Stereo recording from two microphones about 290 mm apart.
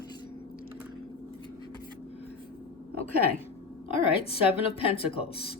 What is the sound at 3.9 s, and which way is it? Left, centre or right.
A woman's voice, centre.